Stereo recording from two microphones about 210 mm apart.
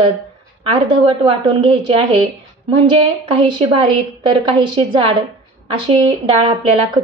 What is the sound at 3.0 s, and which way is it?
A woman's voice, 25° right (ahead or behind).